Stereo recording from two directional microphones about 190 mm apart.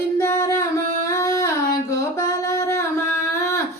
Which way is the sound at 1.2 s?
15° left (ahead or behind).